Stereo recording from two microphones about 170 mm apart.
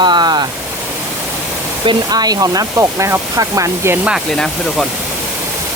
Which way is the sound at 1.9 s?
25° right (ahead or behind).